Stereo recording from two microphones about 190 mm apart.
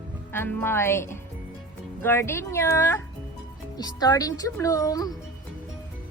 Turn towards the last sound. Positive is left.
turn(degrees=20)  # may be behind; listen again after turning